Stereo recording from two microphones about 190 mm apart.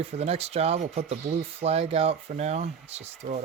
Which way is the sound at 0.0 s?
35° right (ahead or behind).